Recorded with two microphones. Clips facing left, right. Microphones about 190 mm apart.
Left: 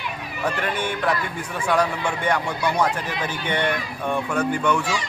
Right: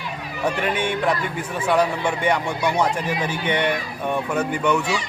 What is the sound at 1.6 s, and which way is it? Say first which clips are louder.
Speech: right 2 dB; 10° right (ahead or behind).